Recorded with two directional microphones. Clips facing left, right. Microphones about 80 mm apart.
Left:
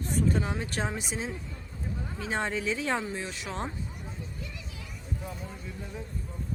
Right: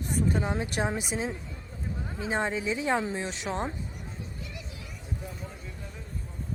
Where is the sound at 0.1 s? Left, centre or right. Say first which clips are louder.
Even; centre.